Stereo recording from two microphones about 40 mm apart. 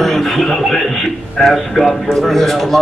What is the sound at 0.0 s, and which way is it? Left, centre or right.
Speech, centre.